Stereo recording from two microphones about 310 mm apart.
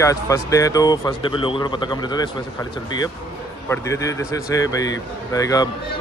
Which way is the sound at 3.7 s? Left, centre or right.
Centre.